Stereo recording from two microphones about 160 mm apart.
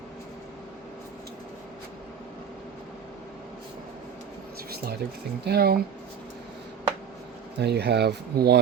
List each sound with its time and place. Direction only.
4.7 s a sound: 75° right (ahead or behind)
5.5 s speech: 75° right (ahead or behind)
7.6 s speech: 90° right